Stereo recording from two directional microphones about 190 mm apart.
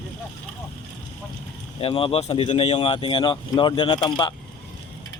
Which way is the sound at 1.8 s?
30° left (ahead or behind).